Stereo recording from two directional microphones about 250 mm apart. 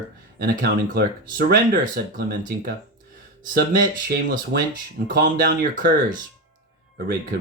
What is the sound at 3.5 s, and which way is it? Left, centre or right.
Speech, right.